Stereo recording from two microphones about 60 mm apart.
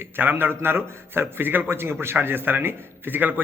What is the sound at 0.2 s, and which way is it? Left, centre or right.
Speech, right.